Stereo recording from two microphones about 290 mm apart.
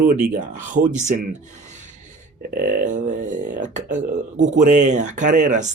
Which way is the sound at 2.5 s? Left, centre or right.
Right.